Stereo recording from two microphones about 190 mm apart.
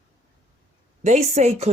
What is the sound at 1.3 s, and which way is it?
Speech, 35° right (ahead or behind).